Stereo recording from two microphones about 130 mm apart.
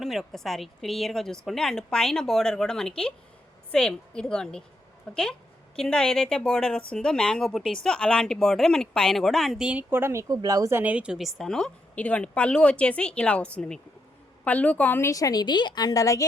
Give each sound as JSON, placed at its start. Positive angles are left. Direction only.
{"t": 0.0, "sound": "a woman's voice", "side_deg": 0}
{"t": 10.8, "sound": "a woman's voice", "side_deg": -10}